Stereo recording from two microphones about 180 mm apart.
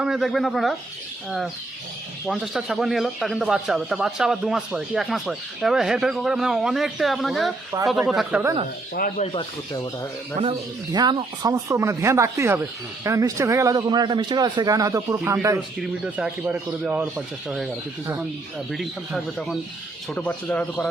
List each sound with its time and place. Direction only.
0.0 s a man's voice: centre (ahead or behind)
2.2 s a man's voice: centre (ahead or behind)
9.0 s speech: 45° left (ahead or behind); by 10.1 s 20° left (ahead or behind)
10.9 s a man's voice: 25° right (ahead or behind); by 17.7 s 5° right (ahead or behind)
18.7 s a man's voice: centre (ahead or behind)